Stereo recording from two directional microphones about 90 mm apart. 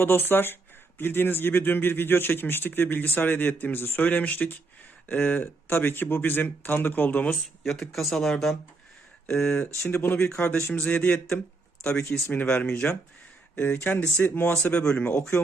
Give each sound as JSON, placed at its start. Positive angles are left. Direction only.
{"t": 0.0, "sound": "speech", "side_deg": 25}
{"t": 7.6, "sound": "speech", "side_deg": 5}
{"t": 9.9, "sound": "speech", "side_deg": 25}
{"t": 13.6, "sound": "speech", "side_deg": 20}